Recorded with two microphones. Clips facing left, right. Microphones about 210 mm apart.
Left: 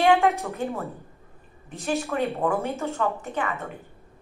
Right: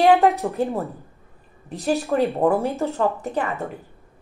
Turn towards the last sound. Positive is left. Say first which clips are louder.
# right 4 dB
turn(degrees=-35)  # may be behind; listen again after turning